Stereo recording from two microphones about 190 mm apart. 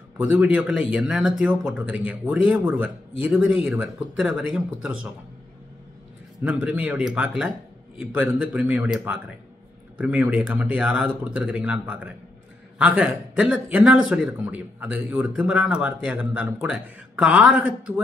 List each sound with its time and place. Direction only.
0.2 s a man's voice: 5° right (ahead or behind)
6.4 s a man's voice: 5° right (ahead or behind)